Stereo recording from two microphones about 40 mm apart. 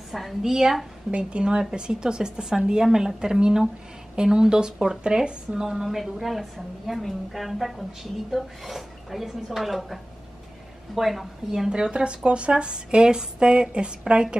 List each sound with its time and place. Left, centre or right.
0.4 s a woman's voice: centre
1.1 s speech: right
5.7 s a woman's voice: centre
11.0 s a woman's voice: centre
11.7 s speech: right